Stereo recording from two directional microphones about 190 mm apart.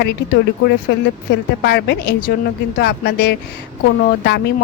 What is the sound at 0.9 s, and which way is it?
Speech, 60° left (ahead or behind).